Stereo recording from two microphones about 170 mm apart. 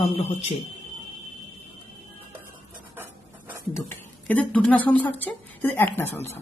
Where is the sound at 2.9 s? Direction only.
10° right (ahead or behind).